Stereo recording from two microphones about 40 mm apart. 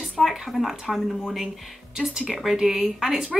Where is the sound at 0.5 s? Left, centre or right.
Centre.